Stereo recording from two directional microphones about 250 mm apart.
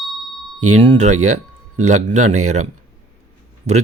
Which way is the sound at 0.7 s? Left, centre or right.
Right.